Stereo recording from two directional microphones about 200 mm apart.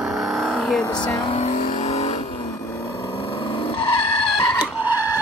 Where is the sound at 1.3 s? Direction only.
35° left (ahead or behind).